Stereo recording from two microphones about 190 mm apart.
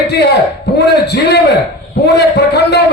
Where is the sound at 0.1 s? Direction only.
60° left (ahead or behind).